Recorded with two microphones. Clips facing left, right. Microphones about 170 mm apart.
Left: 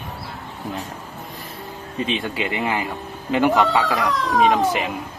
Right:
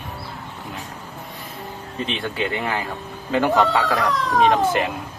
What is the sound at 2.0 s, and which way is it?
Speech, 15° left (ahead or behind).